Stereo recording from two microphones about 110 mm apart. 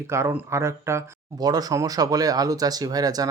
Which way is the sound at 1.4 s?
35° right (ahead or behind).